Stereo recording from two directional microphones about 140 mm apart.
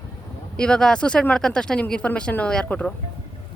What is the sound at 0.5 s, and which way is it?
Speech, 5° left (ahead or behind).